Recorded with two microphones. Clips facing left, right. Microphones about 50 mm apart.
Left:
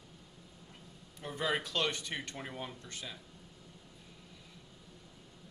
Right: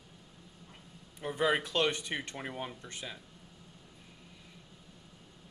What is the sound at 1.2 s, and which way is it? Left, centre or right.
Speech, centre.